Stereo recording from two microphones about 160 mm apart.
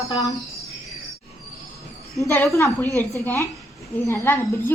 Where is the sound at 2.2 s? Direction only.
20° left (ahead or behind).